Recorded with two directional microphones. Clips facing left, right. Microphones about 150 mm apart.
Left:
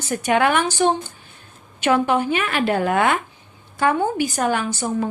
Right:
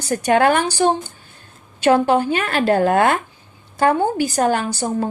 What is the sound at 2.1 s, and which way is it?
A woman's voice, 40° right (ahead or behind).